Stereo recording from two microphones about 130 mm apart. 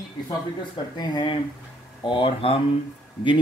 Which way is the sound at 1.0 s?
35° left (ahead or behind).